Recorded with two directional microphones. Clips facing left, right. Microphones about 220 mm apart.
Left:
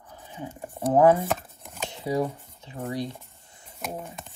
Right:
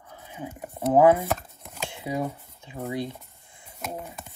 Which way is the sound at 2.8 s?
10° right (ahead or behind).